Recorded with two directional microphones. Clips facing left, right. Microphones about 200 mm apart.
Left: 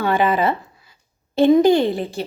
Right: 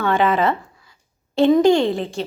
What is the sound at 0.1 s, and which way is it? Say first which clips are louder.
A woman's voice: right 1 dB; 5° left (ahead or behind).